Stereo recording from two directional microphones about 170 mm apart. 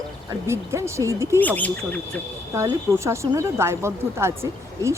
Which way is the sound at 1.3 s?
10° left (ahead or behind).